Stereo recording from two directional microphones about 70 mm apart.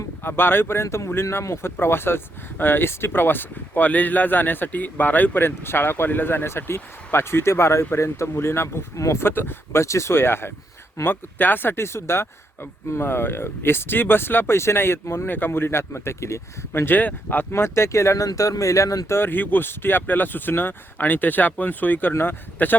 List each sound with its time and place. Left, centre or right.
0.2 s speech: left
9.2 s speech: left
17.5 s speech: left
18.3 s speech: left
19.1 s speech: left